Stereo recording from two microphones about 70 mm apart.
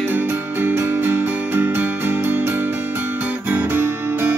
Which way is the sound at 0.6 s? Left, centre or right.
Right.